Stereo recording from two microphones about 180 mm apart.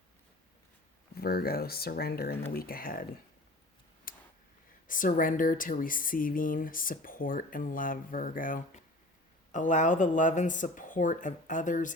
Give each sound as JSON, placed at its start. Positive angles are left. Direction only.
{"t": 1.1, "sound": "speech", "side_deg": 60}
{"t": 4.1, "sound": "a sound", "side_deg": 55}
{"t": 4.9, "sound": "speech", "side_deg": 50}